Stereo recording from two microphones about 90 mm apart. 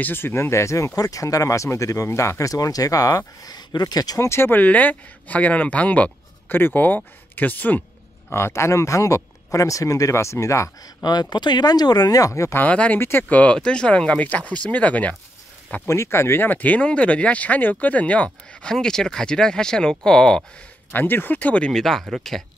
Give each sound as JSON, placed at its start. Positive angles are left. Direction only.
{"t": 0.0, "sound": "speech", "side_deg": 25}
{"t": 4.3, "sound": "speech", "side_deg": 25}
{"t": 8.3, "sound": "speech", "side_deg": 30}
{"t": 12.5, "sound": "speech", "side_deg": 15}
{"t": 15.9, "sound": "speech", "side_deg": 30}
{"t": 20.9, "sound": "speech", "side_deg": 20}